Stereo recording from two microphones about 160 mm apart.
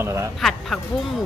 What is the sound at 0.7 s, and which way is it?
Speech, centre (ahead or behind).